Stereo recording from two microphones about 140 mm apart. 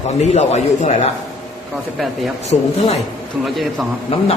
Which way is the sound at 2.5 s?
50° left (ahead or behind).